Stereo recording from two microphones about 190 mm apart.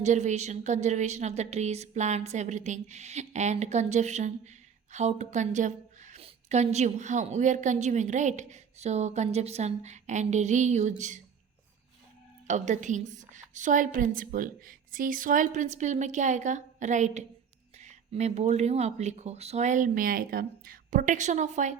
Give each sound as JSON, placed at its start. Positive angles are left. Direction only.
{"t": 0.0, "sound": "a woman's voice", "side_deg": -40}
{"t": 12.5, "sound": "a woman's voice", "side_deg": -40}